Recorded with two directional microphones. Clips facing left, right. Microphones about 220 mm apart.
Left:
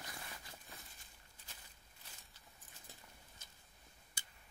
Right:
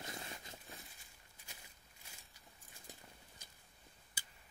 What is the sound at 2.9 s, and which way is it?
Patter, 15° right (ahead or behind).